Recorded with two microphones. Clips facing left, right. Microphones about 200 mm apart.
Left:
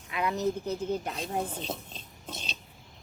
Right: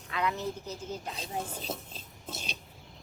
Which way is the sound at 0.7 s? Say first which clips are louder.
Left 7 dB; 60° left (ahead or behind).